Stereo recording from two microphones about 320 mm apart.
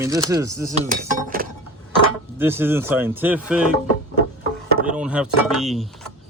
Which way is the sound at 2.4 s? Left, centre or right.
Centre.